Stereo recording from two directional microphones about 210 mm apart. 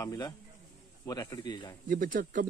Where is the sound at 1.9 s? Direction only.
40° right (ahead or behind).